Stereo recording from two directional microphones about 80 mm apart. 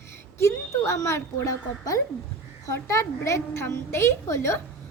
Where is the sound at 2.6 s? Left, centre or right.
Left.